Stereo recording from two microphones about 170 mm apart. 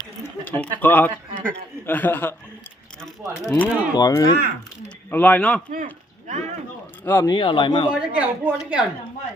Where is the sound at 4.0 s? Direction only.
20° left (ahead or behind).